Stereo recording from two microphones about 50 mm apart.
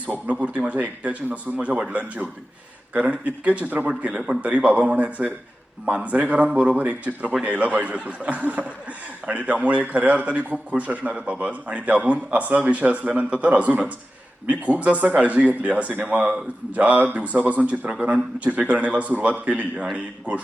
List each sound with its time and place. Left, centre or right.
0.0 s a man's voice: right